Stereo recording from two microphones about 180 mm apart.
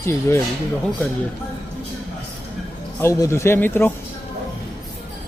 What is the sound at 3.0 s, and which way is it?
Speech, 15° left (ahead or behind).